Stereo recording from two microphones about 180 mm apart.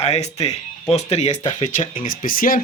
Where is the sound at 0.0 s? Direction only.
35° left (ahead or behind).